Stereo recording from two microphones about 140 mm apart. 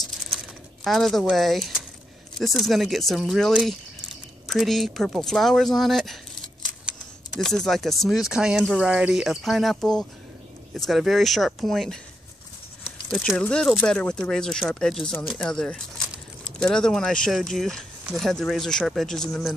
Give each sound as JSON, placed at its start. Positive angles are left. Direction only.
{"t": 0.8, "sound": "speech", "side_deg": 0}
{"t": 7.3, "sound": "speech", "side_deg": 0}
{"t": 13.1, "sound": "speech", "side_deg": 0}